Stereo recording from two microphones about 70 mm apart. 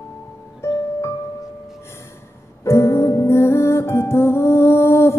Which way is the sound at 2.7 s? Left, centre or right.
Left.